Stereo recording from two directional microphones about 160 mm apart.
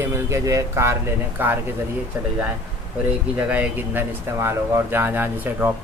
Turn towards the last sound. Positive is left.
turn(degrees=-10)  # may be behind; listen again after turning